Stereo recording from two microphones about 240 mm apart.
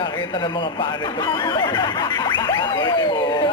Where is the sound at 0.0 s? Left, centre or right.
Centre.